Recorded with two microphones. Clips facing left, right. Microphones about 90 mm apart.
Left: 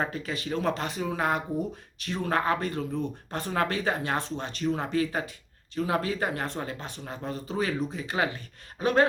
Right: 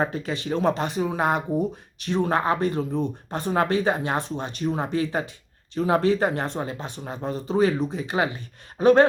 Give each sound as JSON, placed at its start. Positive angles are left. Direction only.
{"t": 0.0, "sound": "speech", "side_deg": -25}